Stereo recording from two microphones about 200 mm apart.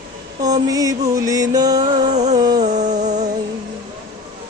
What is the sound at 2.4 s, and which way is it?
Music, 20° right (ahead or behind).